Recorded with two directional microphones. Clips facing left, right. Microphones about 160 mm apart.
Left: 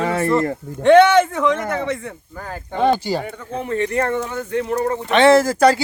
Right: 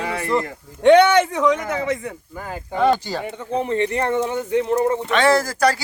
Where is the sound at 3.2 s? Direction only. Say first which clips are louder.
Right 3 dB; 20° right (ahead or behind).